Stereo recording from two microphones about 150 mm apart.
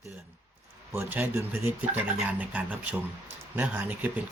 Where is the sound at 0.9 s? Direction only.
15° right (ahead or behind).